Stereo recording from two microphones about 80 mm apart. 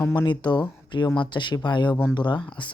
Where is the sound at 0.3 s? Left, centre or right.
Left.